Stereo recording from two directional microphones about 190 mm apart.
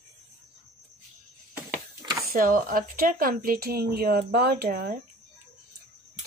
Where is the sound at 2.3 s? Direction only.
45° right (ahead or behind).